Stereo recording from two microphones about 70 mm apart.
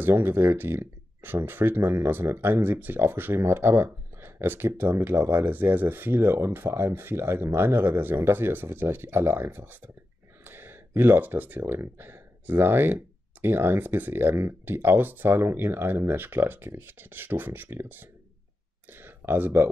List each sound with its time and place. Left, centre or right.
0.0 s speech: right